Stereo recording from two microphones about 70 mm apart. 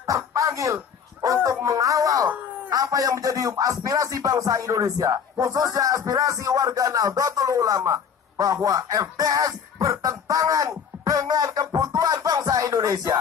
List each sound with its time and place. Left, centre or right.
0.0 s a sound: right
1.2 s speech: right
2.2 s speech: right